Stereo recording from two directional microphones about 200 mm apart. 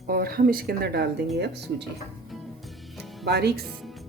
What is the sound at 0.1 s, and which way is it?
Speech, 50° right (ahead or behind).